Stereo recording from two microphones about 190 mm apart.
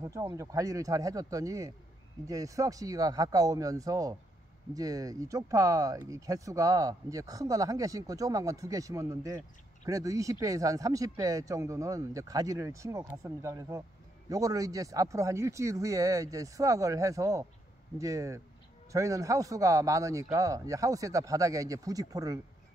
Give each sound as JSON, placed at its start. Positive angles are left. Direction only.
{"t": 0.0, "sound": "speech", "side_deg": -15}